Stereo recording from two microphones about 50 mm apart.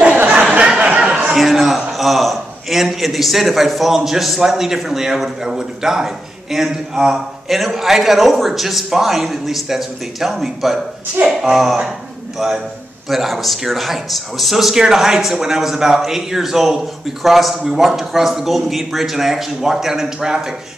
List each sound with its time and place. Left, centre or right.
0.7 s chatter: right
1.3 s a man's voice: centre
11.2 s speech: right
11.5 s a man's voice: centre